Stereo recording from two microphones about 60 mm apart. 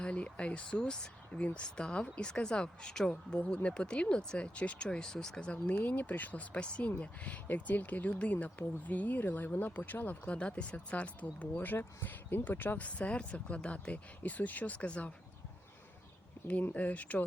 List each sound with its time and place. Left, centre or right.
0.0 s speech: centre
5.7 s speech: left
10.3 s speech: centre
16.7 s speech: left